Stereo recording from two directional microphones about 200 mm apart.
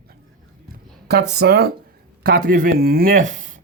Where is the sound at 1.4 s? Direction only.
50° right (ahead or behind).